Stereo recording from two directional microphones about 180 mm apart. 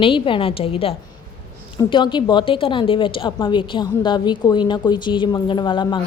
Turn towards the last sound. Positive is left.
turn(degrees=25)  # may be behind; listen again after turning